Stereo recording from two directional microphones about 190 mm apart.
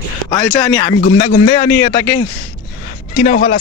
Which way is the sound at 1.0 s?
35° left (ahead or behind).